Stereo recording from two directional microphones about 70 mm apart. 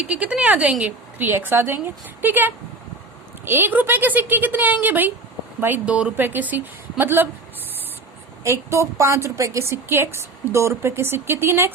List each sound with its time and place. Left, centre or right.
0.0 s a woman's voice: centre
5.8 s speech: centre
6.1 s a woman's voice: right
8.4 s a woman's voice: right